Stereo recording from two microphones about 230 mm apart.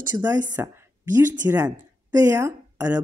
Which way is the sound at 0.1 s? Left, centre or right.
Centre.